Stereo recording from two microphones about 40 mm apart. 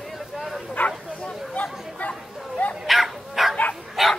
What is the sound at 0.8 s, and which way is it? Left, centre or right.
Bow-wow, left.